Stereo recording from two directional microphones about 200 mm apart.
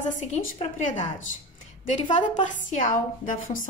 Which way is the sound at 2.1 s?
40° left (ahead or behind).